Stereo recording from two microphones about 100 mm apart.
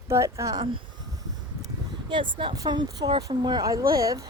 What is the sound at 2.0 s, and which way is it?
Speech, 55° right (ahead or behind).